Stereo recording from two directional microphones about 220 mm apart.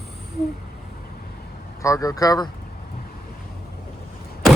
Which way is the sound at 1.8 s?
15° left (ahead or behind).